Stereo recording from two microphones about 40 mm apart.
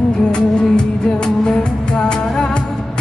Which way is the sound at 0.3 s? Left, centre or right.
Left.